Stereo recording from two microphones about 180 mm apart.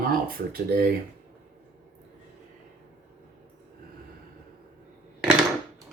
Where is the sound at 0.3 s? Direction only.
60° right (ahead or behind).